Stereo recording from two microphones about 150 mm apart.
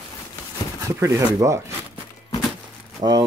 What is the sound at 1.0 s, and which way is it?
Speech, 20° right (ahead or behind).